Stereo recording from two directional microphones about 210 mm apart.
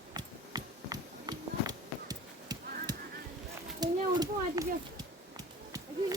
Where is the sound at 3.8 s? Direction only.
20° right (ahead or behind).